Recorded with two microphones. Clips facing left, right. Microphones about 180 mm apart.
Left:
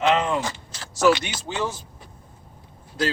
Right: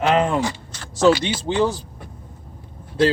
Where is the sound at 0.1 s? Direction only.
45° right (ahead or behind).